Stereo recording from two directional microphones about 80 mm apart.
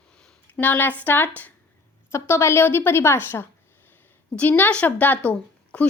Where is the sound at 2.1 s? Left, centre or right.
Left.